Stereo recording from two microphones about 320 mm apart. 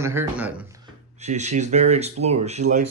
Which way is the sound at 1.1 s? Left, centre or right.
Right.